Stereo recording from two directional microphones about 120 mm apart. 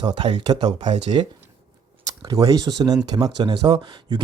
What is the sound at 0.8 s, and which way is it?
Speech, 75° right (ahead or behind).